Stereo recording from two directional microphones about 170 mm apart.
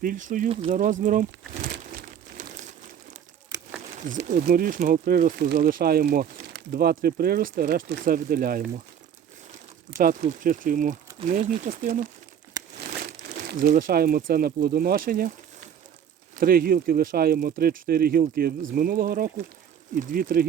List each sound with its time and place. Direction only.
0.0 s speech: 50° right (ahead or behind)
1.7 s crumpling: 55° right (ahead or behind)
4.3 s speech: 55° right (ahead or behind)
10.0 s speech: 55° right (ahead or behind)
12.6 s crumpling: 20° right (ahead or behind)
13.0 s speech: 60° right (ahead or behind)
16.4 s speech: 60° right (ahead or behind)